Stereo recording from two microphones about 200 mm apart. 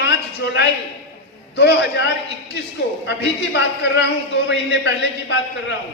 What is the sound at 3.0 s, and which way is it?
Speech, 60° left (ahead or behind).